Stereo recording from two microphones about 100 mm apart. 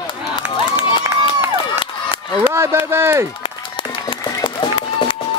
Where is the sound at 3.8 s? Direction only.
55° left (ahead or behind).